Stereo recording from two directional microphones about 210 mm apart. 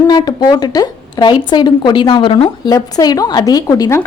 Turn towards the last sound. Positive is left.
turn(degrees=15)  # may be behind; listen again after turning